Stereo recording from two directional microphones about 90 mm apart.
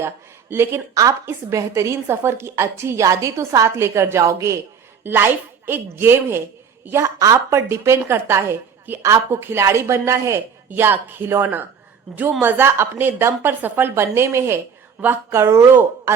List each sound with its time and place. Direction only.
0.5 s a woman's voice: 30° right (ahead or behind)